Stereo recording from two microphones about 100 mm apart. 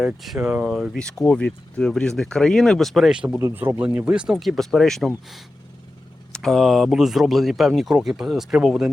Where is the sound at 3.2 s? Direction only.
25° right (ahead or behind); by 5.1 s 5° left (ahead or behind).